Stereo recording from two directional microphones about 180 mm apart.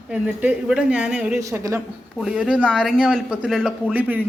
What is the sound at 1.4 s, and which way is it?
Speech, 15° right (ahead or behind).